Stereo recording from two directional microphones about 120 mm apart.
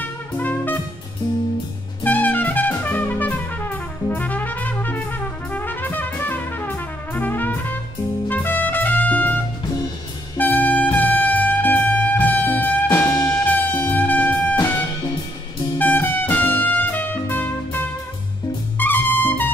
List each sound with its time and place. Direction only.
0.0 s music: 15° left (ahead or behind)
2.0 s music: 15° left (ahead or behind)
15.8 s music: 15° left (ahead or behind)